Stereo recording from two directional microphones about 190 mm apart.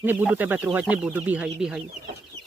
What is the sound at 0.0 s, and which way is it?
Speech, 10° right (ahead or behind).